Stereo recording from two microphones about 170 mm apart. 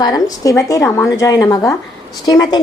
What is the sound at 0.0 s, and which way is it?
A woman's voice, 20° left (ahead or behind).